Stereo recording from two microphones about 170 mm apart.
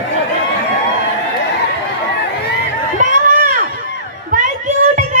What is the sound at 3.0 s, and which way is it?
Run, 50° right (ahead or behind).